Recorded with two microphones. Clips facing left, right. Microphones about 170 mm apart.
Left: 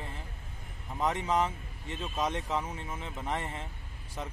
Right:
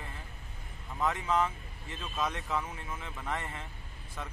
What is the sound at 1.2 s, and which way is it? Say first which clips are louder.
Speech: left 1 dB; 25° left (ahead or behind).